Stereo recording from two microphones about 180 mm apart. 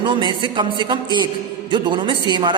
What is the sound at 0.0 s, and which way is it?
A man's voice, 25° right (ahead or behind).